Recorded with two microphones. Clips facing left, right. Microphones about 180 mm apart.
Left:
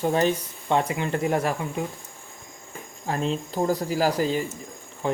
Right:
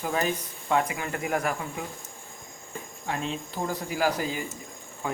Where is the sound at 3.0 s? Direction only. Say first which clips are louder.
Left 5 dB; 40° left (ahead or behind).